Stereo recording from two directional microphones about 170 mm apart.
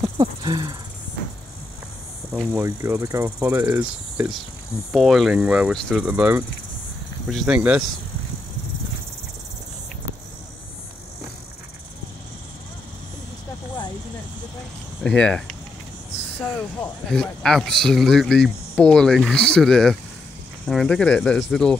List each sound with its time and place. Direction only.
0.2 s speech: 25° right (ahead or behind)
2.3 s cricket: 15° right (ahead or behind)
3.8 s cricket: 5° right (ahead or behind)
4.9 s speech: centre (ahead or behind)
15.0 s speech: 5° left (ahead or behind)
17.1 s speech: 5° left (ahead or behind)